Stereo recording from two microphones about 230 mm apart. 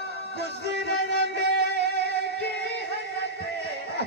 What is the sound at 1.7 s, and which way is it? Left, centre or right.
Music, right.